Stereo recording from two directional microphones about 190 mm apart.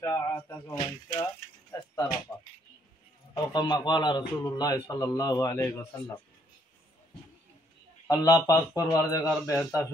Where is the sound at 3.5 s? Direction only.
20° left (ahead or behind).